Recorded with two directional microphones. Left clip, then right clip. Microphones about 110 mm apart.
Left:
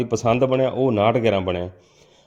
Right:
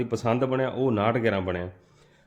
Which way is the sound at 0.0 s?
40° left (ahead or behind).